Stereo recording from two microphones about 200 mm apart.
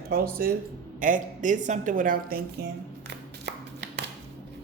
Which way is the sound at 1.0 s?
40° right (ahead or behind).